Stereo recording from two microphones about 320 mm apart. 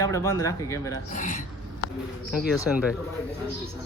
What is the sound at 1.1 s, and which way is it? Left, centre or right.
Speech, left.